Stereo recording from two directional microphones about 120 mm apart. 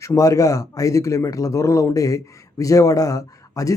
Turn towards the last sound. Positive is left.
turn(degrees=30)  # may be behind; listen again after turning